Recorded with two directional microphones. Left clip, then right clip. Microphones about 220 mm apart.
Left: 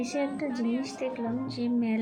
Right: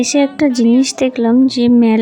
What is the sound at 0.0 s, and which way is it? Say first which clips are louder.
Speech: right 17 dB; 50° right (ahead or behind).